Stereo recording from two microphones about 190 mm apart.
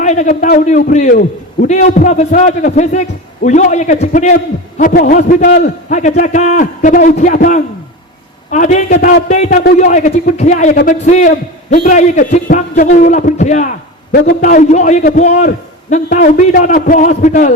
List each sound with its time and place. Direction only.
0.0 s a man's voice: 40° left (ahead or behind)